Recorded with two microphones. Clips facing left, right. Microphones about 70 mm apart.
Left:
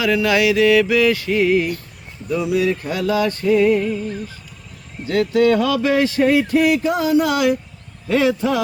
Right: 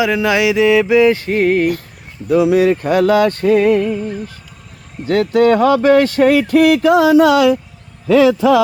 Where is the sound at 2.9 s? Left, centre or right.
Right.